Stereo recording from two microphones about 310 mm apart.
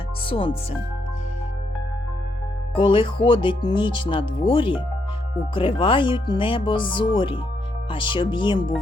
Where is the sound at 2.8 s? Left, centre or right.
Centre.